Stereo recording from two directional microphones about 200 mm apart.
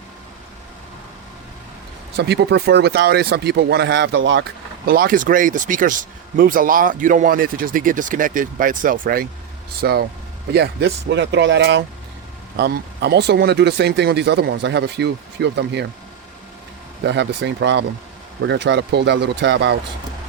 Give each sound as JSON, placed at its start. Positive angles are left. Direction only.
{"t": 2.1, "sound": "speech", "side_deg": -55}
{"t": 17.1, "sound": "speech", "side_deg": -60}